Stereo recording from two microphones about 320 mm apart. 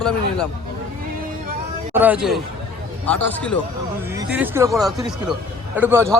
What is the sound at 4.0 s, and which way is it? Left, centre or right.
Speech, centre.